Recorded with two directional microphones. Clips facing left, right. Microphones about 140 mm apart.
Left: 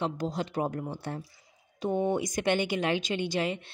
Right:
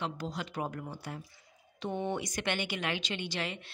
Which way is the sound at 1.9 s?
45° left (ahead or behind).